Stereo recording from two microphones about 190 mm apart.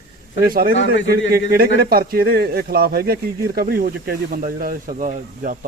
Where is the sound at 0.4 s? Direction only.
50° right (ahead or behind).